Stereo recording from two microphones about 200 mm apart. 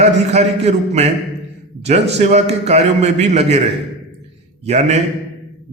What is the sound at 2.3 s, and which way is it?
A man's voice, 35° right (ahead or behind).